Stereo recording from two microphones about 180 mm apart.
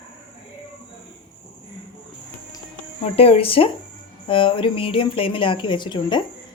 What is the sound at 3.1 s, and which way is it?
Speech, 35° left (ahead or behind).